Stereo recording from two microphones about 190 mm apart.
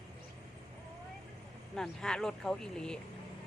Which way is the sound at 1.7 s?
5° left (ahead or behind).